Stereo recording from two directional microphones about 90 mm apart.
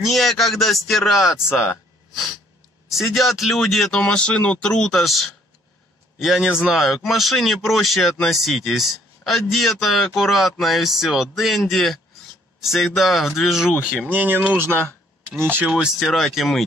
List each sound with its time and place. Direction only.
0.0 s speech: centre (ahead or behind)
2.9 s a man's voice: centre (ahead or behind)
14.1 s speech: 20° right (ahead or behind)
16.0 s speech: 5° left (ahead or behind)